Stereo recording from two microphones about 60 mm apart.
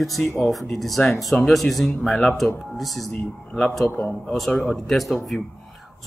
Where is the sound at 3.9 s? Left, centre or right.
Left.